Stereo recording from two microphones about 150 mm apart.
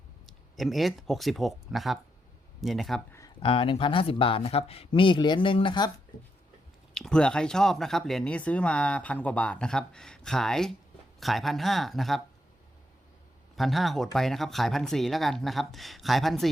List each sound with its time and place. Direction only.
0.3 s speech: centre (ahead or behind)
3.1 s a sound: 20° left (ahead or behind)
3.4 s speech: 35° left (ahead or behind)
6.9 s speech: 5° left (ahead or behind)
13.6 s speech: centre (ahead or behind)